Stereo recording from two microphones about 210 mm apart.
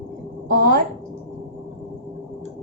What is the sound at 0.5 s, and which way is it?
Speech, 45° right (ahead or behind).